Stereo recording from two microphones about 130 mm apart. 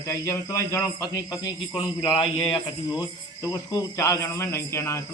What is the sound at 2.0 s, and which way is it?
Speech, 45° left (ahead or behind).